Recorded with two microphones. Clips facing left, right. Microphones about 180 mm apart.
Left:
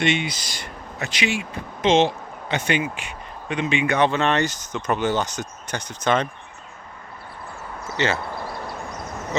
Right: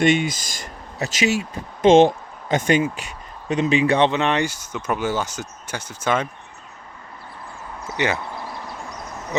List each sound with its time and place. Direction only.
0.0 s speech: 45° right (ahead or behind); by 6.2 s 10° right (ahead or behind)
7.9 s speech: 15° right (ahead or behind)